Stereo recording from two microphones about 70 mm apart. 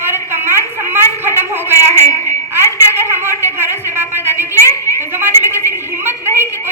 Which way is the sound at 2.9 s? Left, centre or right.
Right.